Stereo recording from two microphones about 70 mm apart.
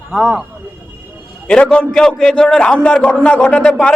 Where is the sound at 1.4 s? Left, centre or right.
Centre.